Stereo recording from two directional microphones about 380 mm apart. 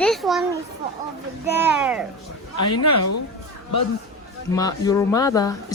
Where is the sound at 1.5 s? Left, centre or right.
Centre.